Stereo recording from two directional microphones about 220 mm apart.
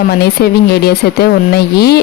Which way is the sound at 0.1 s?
45° left (ahead or behind).